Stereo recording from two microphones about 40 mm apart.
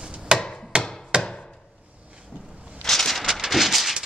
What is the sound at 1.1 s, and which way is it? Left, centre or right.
Chopping, right.